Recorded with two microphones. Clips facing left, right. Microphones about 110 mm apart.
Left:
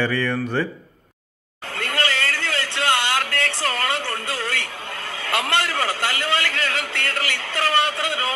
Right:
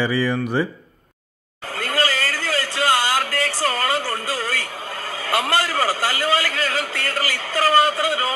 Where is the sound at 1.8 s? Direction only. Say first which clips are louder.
Right 2 dB; 5° right (ahead or behind).